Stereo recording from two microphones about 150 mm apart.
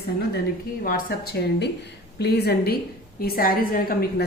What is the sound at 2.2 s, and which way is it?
A woman's voice, 90° left.